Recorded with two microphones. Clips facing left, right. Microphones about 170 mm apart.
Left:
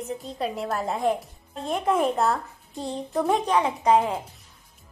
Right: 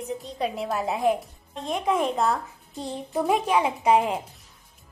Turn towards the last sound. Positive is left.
turn(degrees=-15)  # may be behind; listen again after turning